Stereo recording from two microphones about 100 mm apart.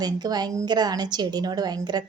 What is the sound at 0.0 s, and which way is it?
A woman's voice, 40° right (ahead or behind).